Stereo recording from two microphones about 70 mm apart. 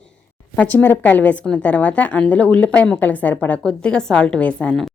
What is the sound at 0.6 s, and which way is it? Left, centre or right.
A woman's voice, left.